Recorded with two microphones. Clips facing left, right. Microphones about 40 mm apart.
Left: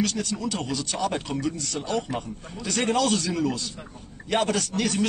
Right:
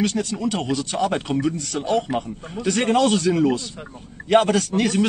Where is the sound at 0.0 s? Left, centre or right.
Right.